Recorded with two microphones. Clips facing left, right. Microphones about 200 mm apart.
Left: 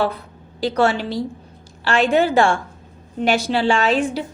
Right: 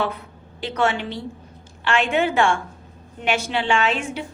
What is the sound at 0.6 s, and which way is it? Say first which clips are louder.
A woman's voice: left 4 dB; 35° left (ahead or behind).